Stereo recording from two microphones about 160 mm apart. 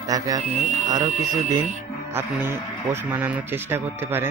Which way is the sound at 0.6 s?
50° right (ahead or behind).